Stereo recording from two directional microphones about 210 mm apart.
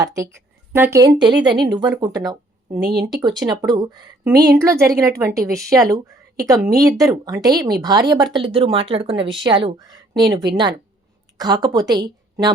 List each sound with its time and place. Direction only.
0.0 s a woman's voice: 15° right (ahead or behind)
2.8 s speech: 50° right (ahead or behind)
3.2 s a woman's voice: 20° right (ahead or behind)
11.3 s a woman's voice: 20° right (ahead or behind)